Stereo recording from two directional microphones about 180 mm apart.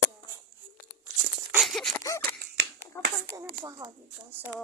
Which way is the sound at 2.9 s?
15° left (ahead or behind).